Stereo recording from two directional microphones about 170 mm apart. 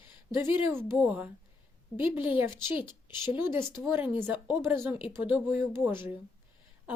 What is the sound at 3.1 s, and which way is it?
Speech, 25° left (ahead or behind).